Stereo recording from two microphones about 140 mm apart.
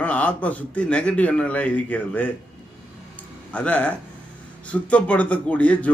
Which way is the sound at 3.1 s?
10° left (ahead or behind).